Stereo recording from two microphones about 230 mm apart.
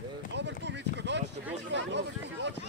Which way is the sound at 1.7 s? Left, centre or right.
Right.